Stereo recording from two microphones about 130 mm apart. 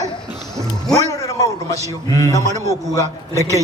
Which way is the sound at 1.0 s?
25° left (ahead or behind).